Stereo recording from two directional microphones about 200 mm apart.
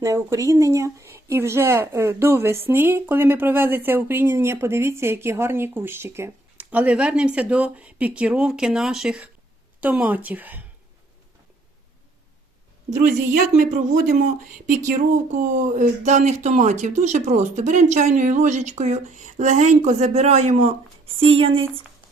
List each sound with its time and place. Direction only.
0.0 s speech: 15° right (ahead or behind)
13.1 s speech: 40° right (ahead or behind)